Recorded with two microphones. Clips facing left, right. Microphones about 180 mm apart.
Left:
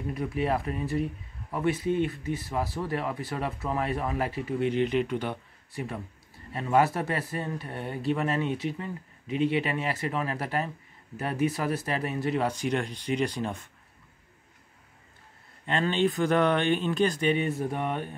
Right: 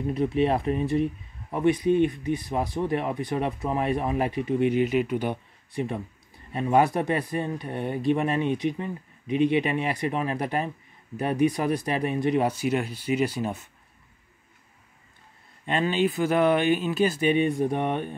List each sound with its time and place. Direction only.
0.1 s speech: 25° right (ahead or behind); by 13.7 s 10° right (ahead or behind)
15.6 s speech: 10° right (ahead or behind)